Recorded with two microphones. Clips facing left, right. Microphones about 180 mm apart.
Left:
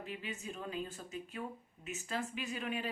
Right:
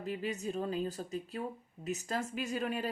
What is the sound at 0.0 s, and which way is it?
Speech, 40° right (ahead or behind).